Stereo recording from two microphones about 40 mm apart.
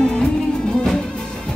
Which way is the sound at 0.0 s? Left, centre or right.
Centre.